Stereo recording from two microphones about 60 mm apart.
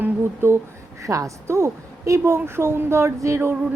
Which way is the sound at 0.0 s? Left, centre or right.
Right.